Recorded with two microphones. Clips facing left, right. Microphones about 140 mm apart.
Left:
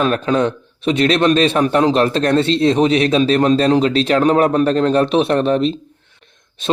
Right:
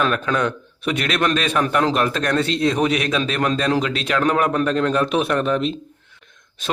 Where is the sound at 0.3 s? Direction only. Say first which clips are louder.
Left 5 dB; 25° left (ahead or behind).